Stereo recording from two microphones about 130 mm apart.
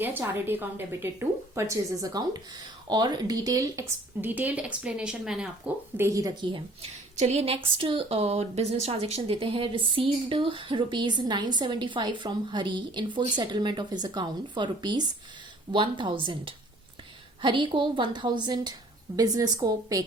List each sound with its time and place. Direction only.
0.0 s a woman's voice: 15° right (ahead or behind)
4.2 s a woman's voice: 15° right (ahead or behind)
6.0 s speech: 25° right (ahead or behind)
7.2 s a woman's voice: 55° right (ahead or behind); by 20.1 s 25° right (ahead or behind)